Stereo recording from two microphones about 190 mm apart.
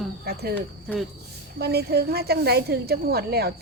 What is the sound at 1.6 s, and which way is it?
Speech, 60° right (ahead or behind).